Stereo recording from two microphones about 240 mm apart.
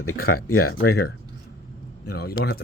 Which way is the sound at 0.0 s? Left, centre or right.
Left.